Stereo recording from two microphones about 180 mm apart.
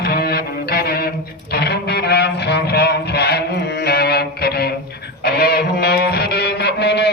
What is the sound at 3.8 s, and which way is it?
Music, 65° left (ahead or behind).